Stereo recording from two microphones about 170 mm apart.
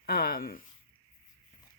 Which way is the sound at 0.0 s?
65° left (ahead or behind).